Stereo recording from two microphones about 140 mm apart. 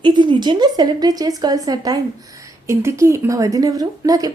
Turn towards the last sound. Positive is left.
turn(degrees=-25)  # may be behind; listen again after turning